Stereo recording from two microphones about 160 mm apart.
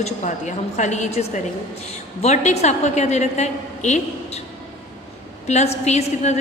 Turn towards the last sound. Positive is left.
turn(degrees=45)  # may be behind; listen again after turning